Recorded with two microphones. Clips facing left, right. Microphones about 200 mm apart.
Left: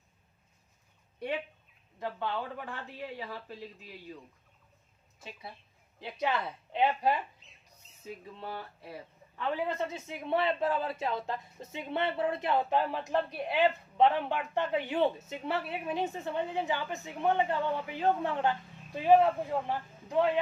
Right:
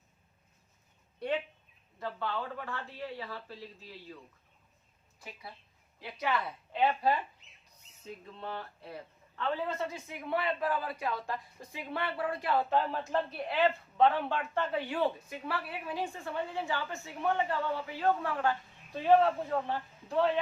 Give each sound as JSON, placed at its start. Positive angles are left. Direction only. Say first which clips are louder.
{"t": 2.0, "sound": "a woman's voice", "louder": "left 1 dB", "side_deg": 20}
{"t": 5.2, "sound": "a woman's voice", "louder": "left 2 dB", "side_deg": 25}